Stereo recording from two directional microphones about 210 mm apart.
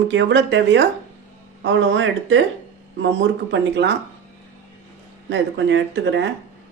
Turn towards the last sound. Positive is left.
turn(degrees=-60)  # may be behind; listen again after turning